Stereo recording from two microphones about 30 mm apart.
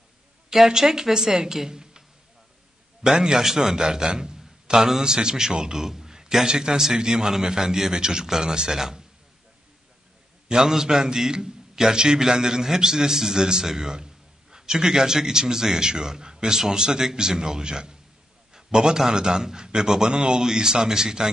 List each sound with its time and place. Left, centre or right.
0.7 s a woman's voice: centre
4.1 s a sound: right
5.0 s a man's voice: right
5.8 s a man's voice: centre
10.5 s a man's voice: centre